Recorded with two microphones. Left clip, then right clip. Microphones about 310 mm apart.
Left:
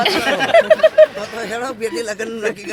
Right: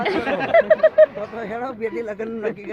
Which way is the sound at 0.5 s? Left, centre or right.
Centre.